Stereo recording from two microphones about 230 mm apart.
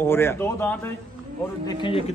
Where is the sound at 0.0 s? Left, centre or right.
Centre.